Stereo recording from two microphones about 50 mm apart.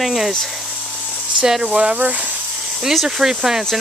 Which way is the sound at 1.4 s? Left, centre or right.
Centre.